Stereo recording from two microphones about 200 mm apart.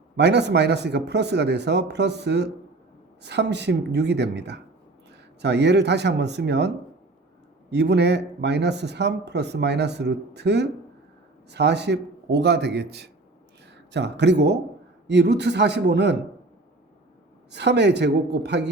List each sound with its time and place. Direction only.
0.2 s a man's voice: 55° right (ahead or behind)
7.7 s a man's voice: 55° right (ahead or behind)
17.5 s a man's voice: 60° right (ahead or behind)